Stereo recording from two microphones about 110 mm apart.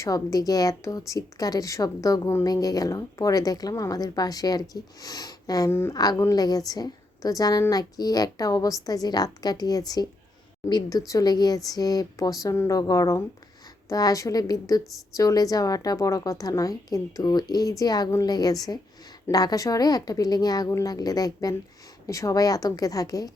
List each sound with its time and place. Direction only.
0.0 s a woman's voice: 30° left (ahead or behind)